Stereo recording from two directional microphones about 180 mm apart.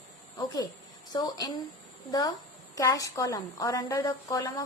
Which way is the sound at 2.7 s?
20° left (ahead or behind).